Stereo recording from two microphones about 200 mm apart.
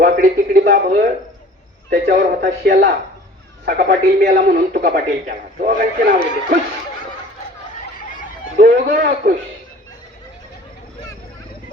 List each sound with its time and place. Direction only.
0.0 s a man's voice: 40° right (ahead or behind)
4.5 s a man's voice: 45° right (ahead or behind)
8.5 s a man's voice: 45° right (ahead or behind)